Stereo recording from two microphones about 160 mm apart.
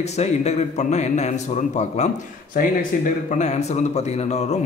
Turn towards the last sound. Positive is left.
turn(degrees=40)  # may be behind; listen again after turning